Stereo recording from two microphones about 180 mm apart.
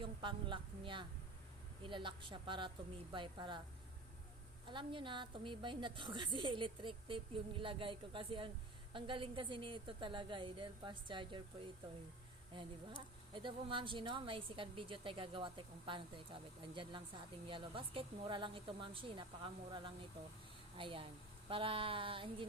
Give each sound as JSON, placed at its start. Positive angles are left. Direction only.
{"t": 0.0, "sound": "a woman's voice", "side_deg": -25}
{"t": 4.6, "sound": "a woman's voice", "side_deg": -25}
{"t": 13.3, "sound": "a woman's voice", "side_deg": -25}